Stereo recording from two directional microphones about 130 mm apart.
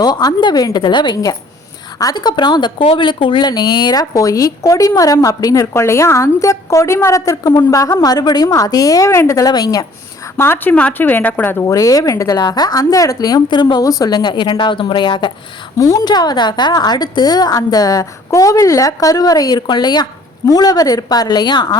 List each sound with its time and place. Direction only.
0.0 s a woman's voice: 30° left (ahead or behind)
10.3 s a woman's voice: 20° left (ahead or behind)
11.6 s a woman's voice: 25° left (ahead or behind)